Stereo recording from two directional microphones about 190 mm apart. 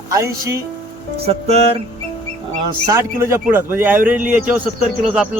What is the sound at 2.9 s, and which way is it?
Speech, 15° right (ahead or behind).